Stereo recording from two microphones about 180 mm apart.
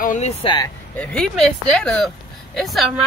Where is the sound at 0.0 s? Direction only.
40° left (ahead or behind).